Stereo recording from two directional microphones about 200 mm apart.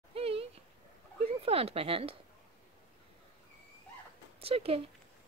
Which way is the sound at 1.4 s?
30° right (ahead or behind).